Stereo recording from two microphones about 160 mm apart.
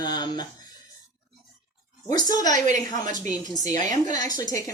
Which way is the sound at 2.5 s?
50° right (ahead or behind).